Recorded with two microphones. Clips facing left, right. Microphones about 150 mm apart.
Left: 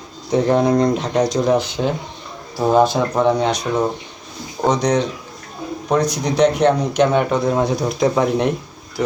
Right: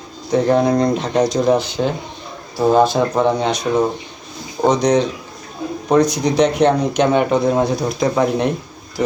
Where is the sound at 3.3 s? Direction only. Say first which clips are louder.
Left 1 dB; 10° left (ahead or behind).